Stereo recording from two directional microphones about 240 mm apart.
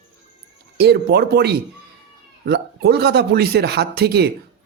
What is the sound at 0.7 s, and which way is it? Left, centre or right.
A man's voice, right.